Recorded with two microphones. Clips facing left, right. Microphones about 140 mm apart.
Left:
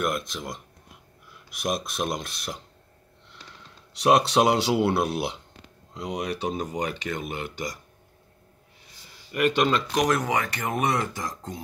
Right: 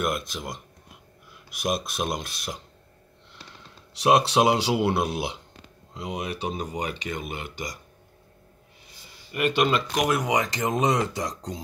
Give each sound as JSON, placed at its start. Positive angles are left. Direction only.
{"t": 0.0, "sound": "speech", "side_deg": -5}
{"t": 1.6, "sound": "speech", "side_deg": -5}
{"t": 4.0, "sound": "speech", "side_deg": -5}
{"t": 9.3, "sound": "speech", "side_deg": -5}